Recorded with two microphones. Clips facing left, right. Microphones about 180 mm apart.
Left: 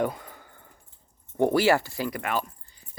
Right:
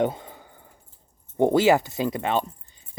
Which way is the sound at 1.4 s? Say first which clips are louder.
Right 3 dB; 20° right (ahead or behind).